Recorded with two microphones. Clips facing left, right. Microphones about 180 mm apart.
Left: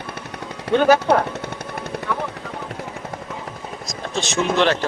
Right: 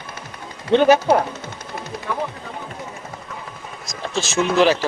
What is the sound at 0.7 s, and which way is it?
Speech, 20° right (ahead or behind).